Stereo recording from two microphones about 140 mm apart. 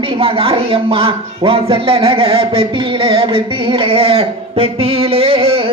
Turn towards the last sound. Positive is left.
turn(degrees=-40)  # may be behind; listen again after turning